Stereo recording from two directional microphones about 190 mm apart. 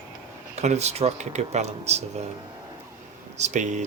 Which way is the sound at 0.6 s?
35° right (ahead or behind).